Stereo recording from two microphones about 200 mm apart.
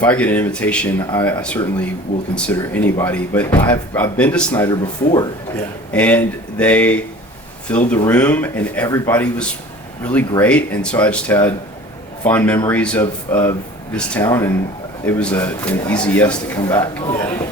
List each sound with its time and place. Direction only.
0.0 s speech: 5° left (ahead or behind)
4.7 s speech: 20° left (ahead or behind)
5.9 s speech: 5° left (ahead or behind)